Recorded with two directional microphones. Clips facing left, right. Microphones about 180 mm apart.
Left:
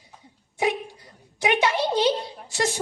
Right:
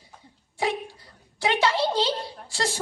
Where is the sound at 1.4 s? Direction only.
20° left (ahead or behind).